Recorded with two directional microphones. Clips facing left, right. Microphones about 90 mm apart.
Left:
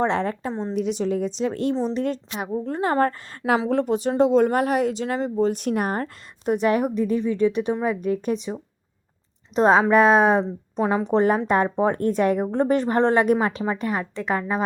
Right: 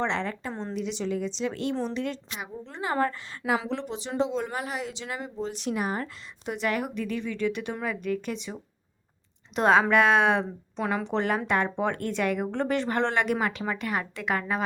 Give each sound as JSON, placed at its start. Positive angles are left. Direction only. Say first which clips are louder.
{"t": 0.0, "sound": "a woman's voice", "louder": "left 6 dB", "side_deg": 45}
{"t": 14.3, "sound": "a woman's voice", "louder": "left 4 dB", "side_deg": 10}